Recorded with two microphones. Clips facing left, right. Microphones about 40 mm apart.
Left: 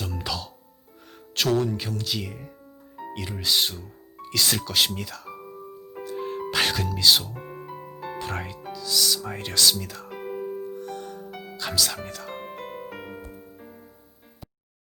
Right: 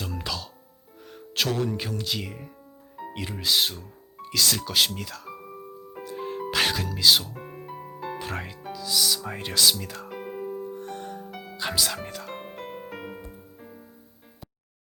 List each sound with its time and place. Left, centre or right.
0.0 s music: centre
1.4 s speech: centre
5.9 s music: centre
8.6 s speech: centre
10.1 s music: centre
10.8 s music: right
11.3 s music: centre
11.5 s speech: centre
11.9 s music: centre